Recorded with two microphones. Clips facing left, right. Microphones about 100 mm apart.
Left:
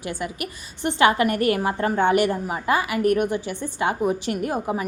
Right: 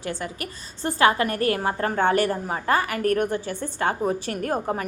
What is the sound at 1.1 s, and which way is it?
Speech, 35° right (ahead or behind).